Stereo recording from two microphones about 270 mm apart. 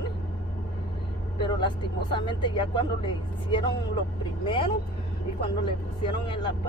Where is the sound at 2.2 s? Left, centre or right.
Centre.